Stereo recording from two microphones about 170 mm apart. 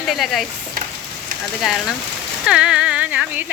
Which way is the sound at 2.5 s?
5° right (ahead or behind).